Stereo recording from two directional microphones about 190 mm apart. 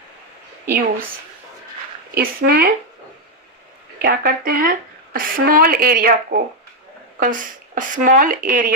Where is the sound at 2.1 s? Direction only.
50° right (ahead or behind).